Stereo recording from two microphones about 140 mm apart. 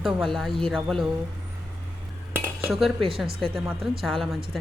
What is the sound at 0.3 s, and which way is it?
Speech, 5° left (ahead or behind).